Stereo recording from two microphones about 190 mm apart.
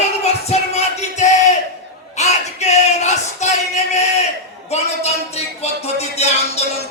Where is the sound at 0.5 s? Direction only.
35° left (ahead or behind).